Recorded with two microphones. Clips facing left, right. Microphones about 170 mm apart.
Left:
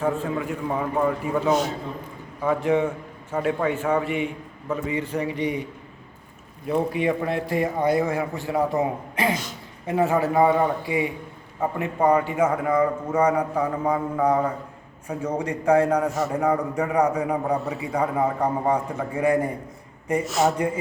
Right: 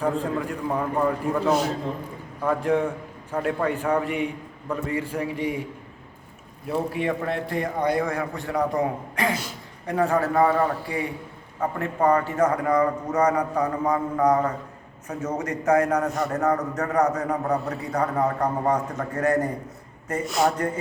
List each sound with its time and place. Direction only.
0.0 s a man's voice: 5° left (ahead or behind)
5.0 s a man's voice: 5° right (ahead or behind)
6.7 s a man's voice: centre (ahead or behind)
8.8 s a man's voice: 25° left (ahead or behind); by 20.7 s 5° left (ahead or behind)